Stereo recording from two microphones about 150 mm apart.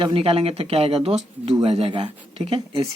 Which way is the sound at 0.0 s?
40° right (ahead or behind).